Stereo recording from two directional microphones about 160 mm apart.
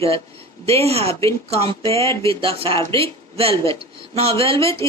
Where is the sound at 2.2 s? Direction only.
35° right (ahead or behind).